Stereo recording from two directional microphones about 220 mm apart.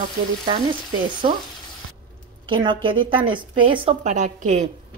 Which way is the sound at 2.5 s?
20° right (ahead or behind).